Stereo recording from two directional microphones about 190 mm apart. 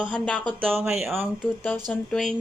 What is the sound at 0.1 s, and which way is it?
Speech, 5° left (ahead or behind).